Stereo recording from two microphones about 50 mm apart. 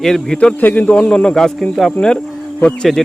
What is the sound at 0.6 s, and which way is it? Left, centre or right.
Speech, left.